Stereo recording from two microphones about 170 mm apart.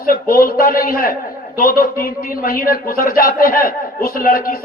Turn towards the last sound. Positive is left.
turn(degrees=60)  # may be behind; listen again after turning